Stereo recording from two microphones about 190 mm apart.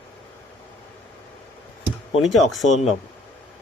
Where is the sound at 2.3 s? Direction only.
Centre (ahead or behind).